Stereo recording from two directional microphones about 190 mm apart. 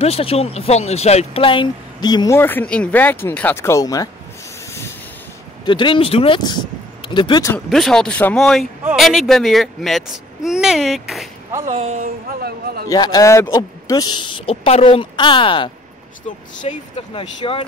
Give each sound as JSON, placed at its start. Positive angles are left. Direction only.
{"t": 0.0, "sound": "speech", "side_deg": 30}
{"t": 5.7, "sound": "speech", "side_deg": 25}
{"t": 7.5, "sound": "speech", "side_deg": 5}
{"t": 11.6, "sound": "speech", "side_deg": -35}
{"t": 12.4, "sound": "a man's voice", "side_deg": -55}
{"t": 12.8, "sound": "speech", "side_deg": 20}